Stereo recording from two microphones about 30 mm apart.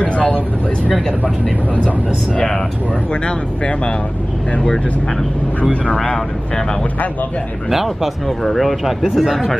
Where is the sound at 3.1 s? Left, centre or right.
Left.